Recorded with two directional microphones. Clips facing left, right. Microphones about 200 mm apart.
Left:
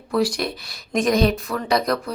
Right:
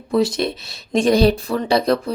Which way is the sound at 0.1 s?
25° right (ahead or behind).